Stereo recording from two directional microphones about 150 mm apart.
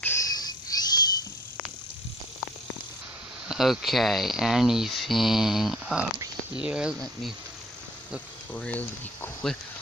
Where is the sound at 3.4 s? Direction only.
Centre (ahead or behind).